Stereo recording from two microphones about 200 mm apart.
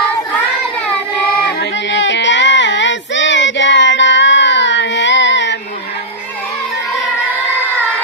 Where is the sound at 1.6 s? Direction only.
65° left (ahead or behind).